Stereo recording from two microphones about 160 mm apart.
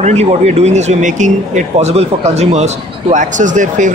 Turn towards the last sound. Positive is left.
turn(degrees=-50)  # may be behind; listen again after turning